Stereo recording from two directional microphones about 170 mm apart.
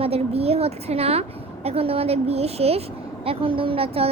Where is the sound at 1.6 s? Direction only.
35° right (ahead or behind).